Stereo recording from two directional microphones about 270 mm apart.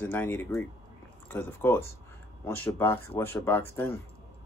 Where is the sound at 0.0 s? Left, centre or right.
Centre.